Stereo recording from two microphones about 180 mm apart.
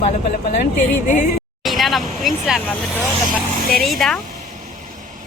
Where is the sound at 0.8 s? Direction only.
45° left (ahead or behind).